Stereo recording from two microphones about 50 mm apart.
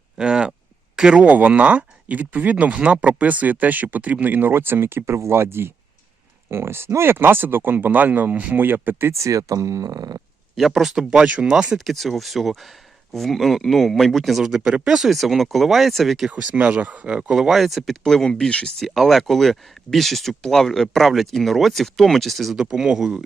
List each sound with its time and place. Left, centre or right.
0.2 s a sound: centre
0.9 s speech: centre
1.2 s speech: right
9.1 s speech: right
10.5 s speech: centre
11.2 s speech: right
11.5 s speech: centre
11.9 s speech: centre
16.3 s speech: right; by 17.6 s centre
17.6 s speech: centre
18.0 s speech: centre
18.8 s speech: centre
22.5 s speech: centre